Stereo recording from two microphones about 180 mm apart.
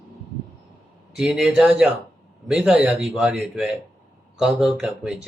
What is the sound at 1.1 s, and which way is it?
Speech, 5° right (ahead or behind).